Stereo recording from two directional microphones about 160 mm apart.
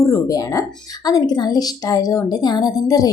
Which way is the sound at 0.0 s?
20° left (ahead or behind).